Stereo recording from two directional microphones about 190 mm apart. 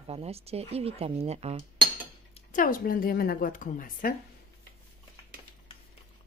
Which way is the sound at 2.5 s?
45° left (ahead or behind).